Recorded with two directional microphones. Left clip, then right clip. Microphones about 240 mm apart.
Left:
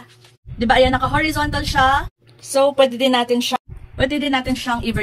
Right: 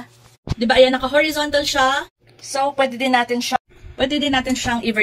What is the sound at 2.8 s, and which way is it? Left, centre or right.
A woman's voice, left.